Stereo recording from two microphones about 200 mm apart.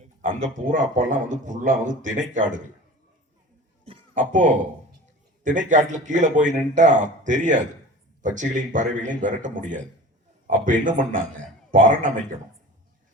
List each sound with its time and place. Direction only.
0.0 s a sound: 40° right (ahead or behind)
0.4 s a man's voice: 40° right (ahead or behind)
3.8 s music: 40° right (ahead or behind)
5.4 s a man's voice: 40° right (ahead or behind)